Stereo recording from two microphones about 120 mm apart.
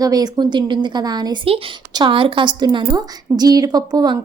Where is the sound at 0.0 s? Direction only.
30° right (ahead or behind).